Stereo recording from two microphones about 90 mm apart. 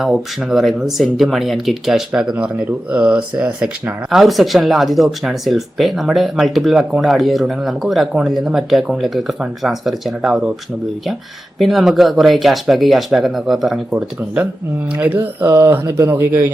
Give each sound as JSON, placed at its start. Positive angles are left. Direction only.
{"t": 0.0, "sound": "speech", "side_deg": -5}
{"t": 11.6, "sound": "speech", "side_deg": 0}
{"t": 14.9, "sound": "speech", "side_deg": -20}